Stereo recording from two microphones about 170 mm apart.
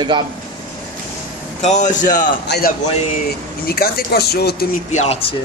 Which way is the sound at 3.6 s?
65° left (ahead or behind).